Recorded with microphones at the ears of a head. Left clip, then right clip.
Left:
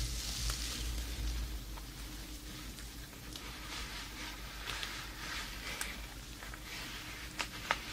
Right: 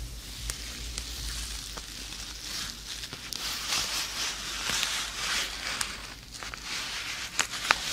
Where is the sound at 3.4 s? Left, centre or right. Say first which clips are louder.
Right 15 dB; right.